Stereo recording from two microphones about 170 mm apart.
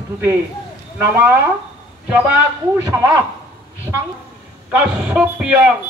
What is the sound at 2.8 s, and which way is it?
Speech, 20° right (ahead or behind).